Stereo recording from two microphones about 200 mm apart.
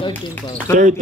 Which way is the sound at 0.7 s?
40° right (ahead or behind).